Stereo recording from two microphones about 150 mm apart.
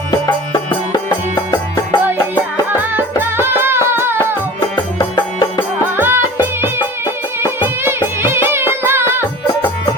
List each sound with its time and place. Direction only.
0.3 s music: 25° left (ahead or behind)
2.9 s music: 15° right (ahead or behind)
4.9 s music: 30° left (ahead or behind)
6.0 s music: 15° right (ahead or behind)